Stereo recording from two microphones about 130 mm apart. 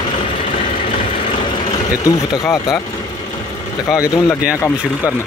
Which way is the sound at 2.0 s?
30° left (ahead or behind).